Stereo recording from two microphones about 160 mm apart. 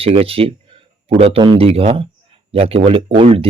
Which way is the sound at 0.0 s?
35° right (ahead or behind).